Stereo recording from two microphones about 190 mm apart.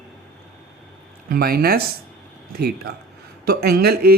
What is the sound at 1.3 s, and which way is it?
Speech, 50° right (ahead or behind).